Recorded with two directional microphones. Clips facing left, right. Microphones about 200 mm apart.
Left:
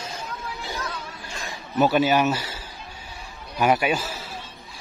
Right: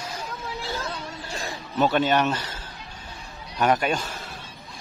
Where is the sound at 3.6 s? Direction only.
10° left (ahead or behind).